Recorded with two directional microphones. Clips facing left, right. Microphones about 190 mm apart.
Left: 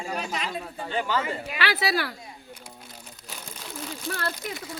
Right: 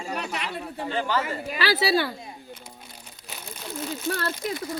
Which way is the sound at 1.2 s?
40° right (ahead or behind).